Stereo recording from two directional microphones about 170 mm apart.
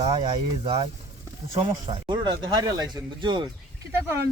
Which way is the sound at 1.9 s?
25° right (ahead or behind).